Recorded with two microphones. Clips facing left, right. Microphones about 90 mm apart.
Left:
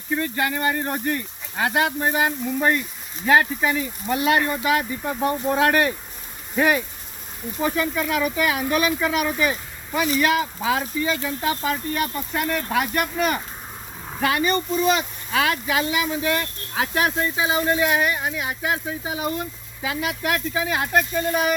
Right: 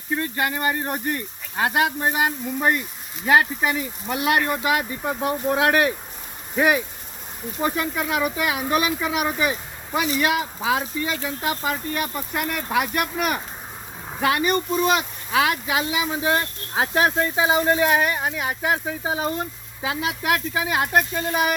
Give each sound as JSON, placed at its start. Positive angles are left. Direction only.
{"t": 0.1, "sound": "speech", "side_deg": -10}
{"t": 20.5, "sound": "speech", "side_deg": -5}